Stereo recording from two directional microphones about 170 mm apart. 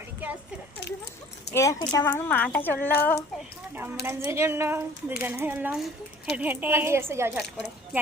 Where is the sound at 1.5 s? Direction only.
15° left (ahead or behind).